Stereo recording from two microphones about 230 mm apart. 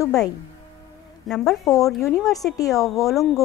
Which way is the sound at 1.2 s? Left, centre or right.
Centre.